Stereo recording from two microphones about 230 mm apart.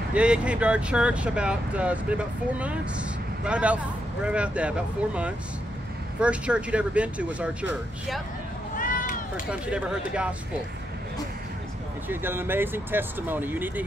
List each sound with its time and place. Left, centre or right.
0.1 s speech: centre
8.7 s run: left
9.5 s speech: centre
12.1 s speech: centre